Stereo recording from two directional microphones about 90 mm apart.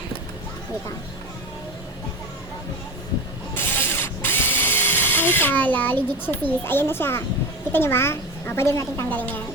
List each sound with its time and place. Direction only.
3.5 s drill: 25° left (ahead or behind)
7.7 s a woman's voice: 25° left (ahead or behind)
9.0 s a woman's voice: 20° left (ahead or behind)